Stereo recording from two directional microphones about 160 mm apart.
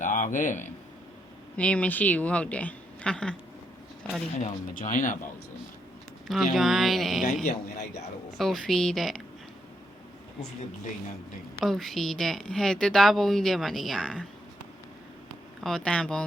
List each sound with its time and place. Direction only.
0.0 s a sound: 55° left (ahead or behind)
1.5 s speech: 10° left (ahead or behind)
4.4 s speech: 50° left (ahead or behind)
6.2 s speech: centre (ahead or behind)
7.8 s a man's voice: 45° left (ahead or behind)
8.4 s speech: centre (ahead or behind)
11.6 s speech: centre (ahead or behind)
15.6 s speech: 5° left (ahead or behind)